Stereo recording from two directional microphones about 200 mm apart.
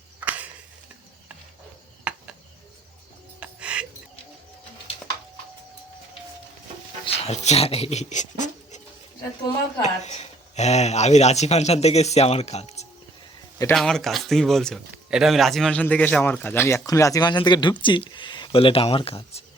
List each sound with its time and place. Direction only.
0.3 s a sound: 5° right (ahead or behind)
2.1 s cricket: 5° right (ahead or behind)
3.4 s a sound: 5° right (ahead or behind)
7.0 s speech: 30° left (ahead or behind)
9.8 s speech: 35° left (ahead or behind)
13.7 s speech: centre (ahead or behind); by 19.5 s 30° left (ahead or behind)